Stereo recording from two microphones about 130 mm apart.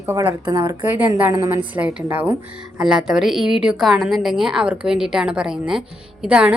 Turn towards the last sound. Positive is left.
turn(degrees=-10)  # may be behind; listen again after turning